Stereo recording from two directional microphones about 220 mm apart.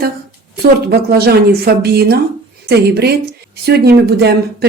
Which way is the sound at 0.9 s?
45° right (ahead or behind).